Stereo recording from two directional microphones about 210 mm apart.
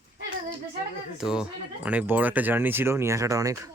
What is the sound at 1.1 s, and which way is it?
Speech, 5° right (ahead or behind).